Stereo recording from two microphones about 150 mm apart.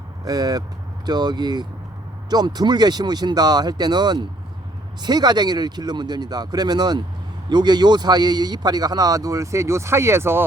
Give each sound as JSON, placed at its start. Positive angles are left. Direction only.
{"t": 0.3, "sound": "a man's voice", "side_deg": -25}